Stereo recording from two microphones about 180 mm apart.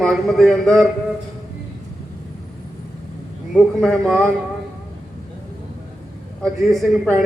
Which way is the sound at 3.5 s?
Centre (ahead or behind).